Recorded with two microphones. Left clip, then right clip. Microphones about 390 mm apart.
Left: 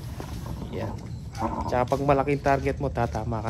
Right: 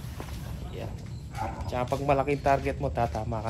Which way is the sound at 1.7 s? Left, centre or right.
Centre.